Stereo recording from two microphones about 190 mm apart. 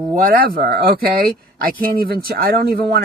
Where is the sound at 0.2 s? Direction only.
50° right (ahead or behind).